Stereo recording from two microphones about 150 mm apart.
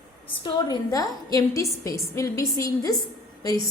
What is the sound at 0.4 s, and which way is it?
A woman's voice, 25° left (ahead or behind).